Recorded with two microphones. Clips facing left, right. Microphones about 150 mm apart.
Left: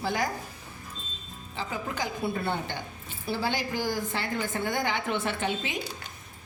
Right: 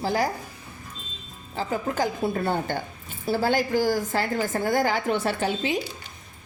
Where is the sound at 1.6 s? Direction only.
40° right (ahead or behind).